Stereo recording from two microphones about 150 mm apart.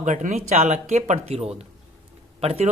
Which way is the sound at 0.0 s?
55° right (ahead or behind).